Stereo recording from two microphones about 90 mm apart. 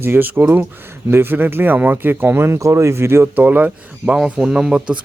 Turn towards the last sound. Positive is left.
turn(degrees=-10)  # may be behind; listen again after turning